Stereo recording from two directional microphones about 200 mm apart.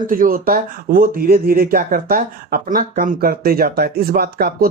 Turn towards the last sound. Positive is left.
turn(degrees=-50)  # may be behind; listen again after turning